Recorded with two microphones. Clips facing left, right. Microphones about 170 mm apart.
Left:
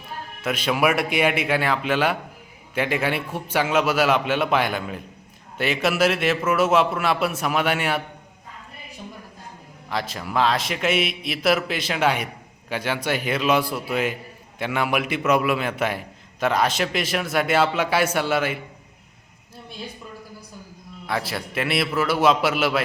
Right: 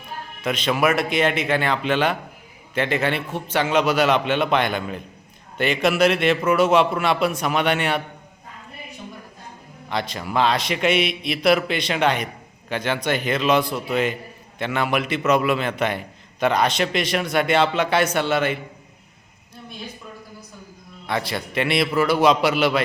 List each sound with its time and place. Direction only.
0.4 s a man's voice: 5° left (ahead or behind)
9.9 s a man's voice: centre (ahead or behind)
21.1 s a man's voice: 5° left (ahead or behind)